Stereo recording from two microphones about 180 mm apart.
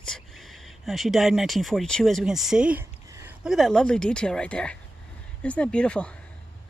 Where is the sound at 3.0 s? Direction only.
15° right (ahead or behind).